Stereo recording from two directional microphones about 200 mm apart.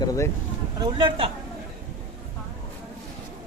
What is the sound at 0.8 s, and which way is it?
Speech, 20° right (ahead or behind).